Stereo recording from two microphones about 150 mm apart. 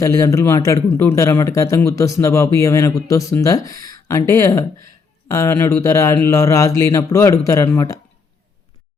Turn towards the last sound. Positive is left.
turn(degrees=20)  # may be behind; listen again after turning